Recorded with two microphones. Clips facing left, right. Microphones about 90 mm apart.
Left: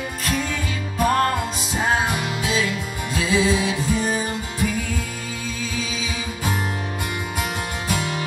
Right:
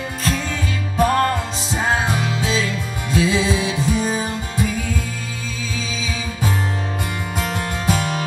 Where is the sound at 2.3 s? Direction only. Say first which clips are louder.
Right 1 dB; 25° right (ahead or behind).